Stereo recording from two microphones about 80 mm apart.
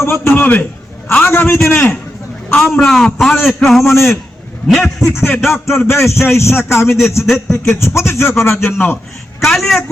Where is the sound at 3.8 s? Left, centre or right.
Left.